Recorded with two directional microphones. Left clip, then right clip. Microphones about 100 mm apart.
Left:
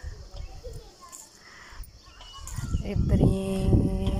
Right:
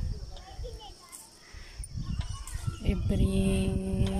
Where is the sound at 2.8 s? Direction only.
30° right (ahead or behind).